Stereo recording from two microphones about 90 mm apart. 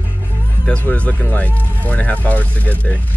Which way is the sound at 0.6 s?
15° left (ahead or behind).